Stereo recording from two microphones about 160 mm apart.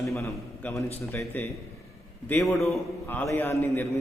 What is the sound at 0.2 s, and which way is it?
A man's voice, 20° left (ahead or behind).